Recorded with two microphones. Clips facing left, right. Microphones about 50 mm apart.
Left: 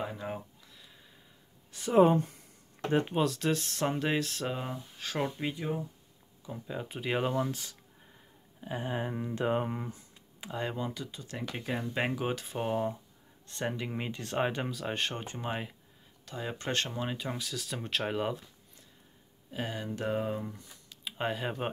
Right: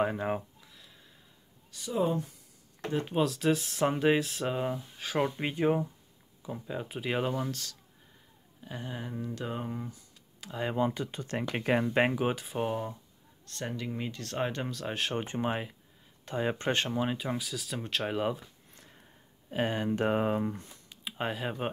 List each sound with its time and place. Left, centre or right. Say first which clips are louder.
0.0 s speech: right 8 dB; right
0.7 s a sound: even; centre
1.7 s speech: left 7 dB; left
3.1 s speech: right 2 dB; centre
5.4 s speech: right 6 dB; right
6.4 s speech: right 2 dB; centre; by 10.5 s left
10.8 s speech: right 7 dB; right
12.1 s speech: right 3 dB; centre
13.5 s speech: left 2 dB; centre
15.1 s speech: right 5 dB; right
16.8 s speech: right 4 dB; centre
19.5 s speech: right 7 dB; right
21.2 s speech: even; centre